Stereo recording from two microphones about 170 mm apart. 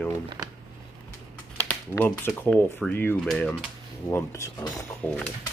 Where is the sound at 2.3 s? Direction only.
10° left (ahead or behind).